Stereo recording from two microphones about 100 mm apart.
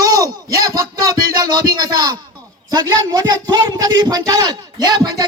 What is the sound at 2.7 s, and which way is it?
A man's voice, 40° right (ahead or behind).